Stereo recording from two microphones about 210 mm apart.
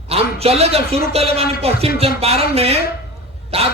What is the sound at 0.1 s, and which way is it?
A man's voice, 30° right (ahead or behind).